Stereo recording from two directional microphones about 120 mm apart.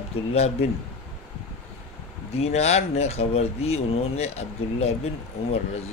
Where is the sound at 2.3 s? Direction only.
60° left (ahead or behind).